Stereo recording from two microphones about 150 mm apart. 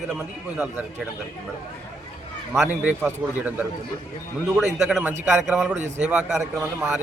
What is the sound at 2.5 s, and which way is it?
A man's voice, 10° right (ahead or behind).